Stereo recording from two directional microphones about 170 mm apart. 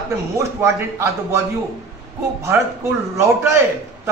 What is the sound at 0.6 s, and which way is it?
Speech, 15° right (ahead or behind).